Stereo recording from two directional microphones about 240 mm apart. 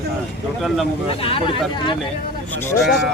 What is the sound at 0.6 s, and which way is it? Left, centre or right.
Speech, centre.